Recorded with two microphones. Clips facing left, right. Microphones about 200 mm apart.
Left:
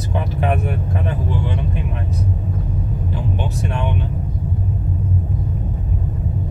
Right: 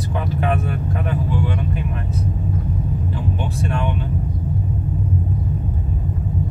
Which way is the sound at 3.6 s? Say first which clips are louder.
Right 2 dB; 20° left (ahead or behind).